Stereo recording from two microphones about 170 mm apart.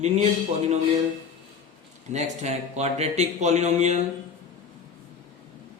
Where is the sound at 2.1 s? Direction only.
40° right (ahead or behind).